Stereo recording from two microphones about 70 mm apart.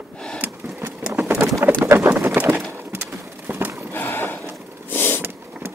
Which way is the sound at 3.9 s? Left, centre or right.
Left.